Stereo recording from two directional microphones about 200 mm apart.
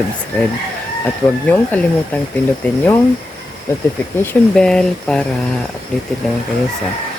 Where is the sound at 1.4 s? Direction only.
10° left (ahead or behind).